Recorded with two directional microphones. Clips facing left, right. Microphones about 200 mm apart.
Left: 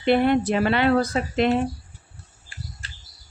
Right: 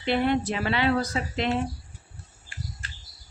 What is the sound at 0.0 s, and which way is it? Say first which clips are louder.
Speech: left 5 dB; 55° left (ahead or behind).